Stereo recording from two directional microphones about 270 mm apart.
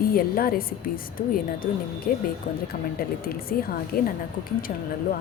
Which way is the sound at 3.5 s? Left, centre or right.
Left.